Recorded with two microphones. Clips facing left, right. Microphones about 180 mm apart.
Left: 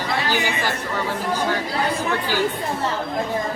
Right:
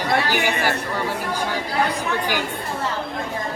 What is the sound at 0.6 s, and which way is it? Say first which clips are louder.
Speech: right 1 dB; 10° right (ahead or behind).